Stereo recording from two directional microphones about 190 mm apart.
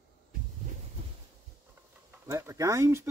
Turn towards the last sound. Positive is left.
turn(degrees=-15)  # may be behind; listen again after turning